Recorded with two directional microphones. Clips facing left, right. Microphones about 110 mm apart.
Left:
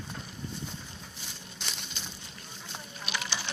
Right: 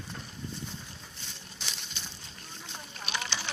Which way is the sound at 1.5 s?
Centre (ahead or behind).